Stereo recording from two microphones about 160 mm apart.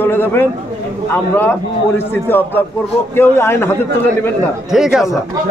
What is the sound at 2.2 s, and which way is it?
Speech, 15° left (ahead or behind).